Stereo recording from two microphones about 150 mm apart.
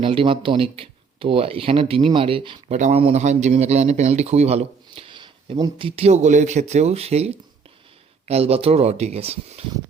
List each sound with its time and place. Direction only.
0.0 s speech: 35° right (ahead or behind)
2.7 s a man's voice: 55° right (ahead or behind); by 5.7 s 30° right (ahead or behind)
5.8 s speech: 45° right (ahead or behind)